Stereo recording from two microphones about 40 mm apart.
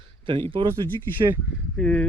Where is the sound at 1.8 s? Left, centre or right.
Left.